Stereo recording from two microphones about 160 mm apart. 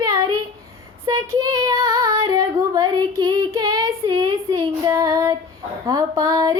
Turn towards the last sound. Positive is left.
turn(degrees=-25)  # may be behind; listen again after turning